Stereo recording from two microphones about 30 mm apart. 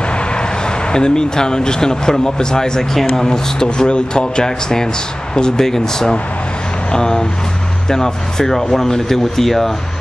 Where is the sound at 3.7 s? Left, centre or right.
Left.